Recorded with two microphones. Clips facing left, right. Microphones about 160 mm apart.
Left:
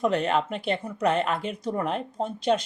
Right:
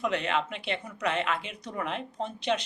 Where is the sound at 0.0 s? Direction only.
40° left (ahead or behind).